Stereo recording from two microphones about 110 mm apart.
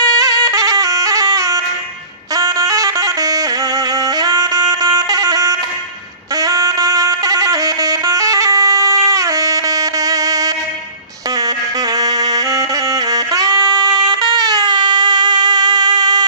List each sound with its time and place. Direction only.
0.0 s music: 35° right (ahead or behind)